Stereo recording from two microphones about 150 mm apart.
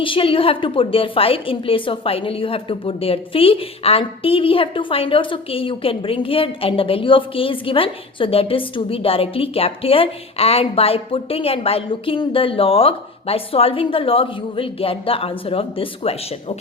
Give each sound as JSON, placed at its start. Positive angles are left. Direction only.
{"t": 0.0, "sound": "a woman's voice", "side_deg": 35}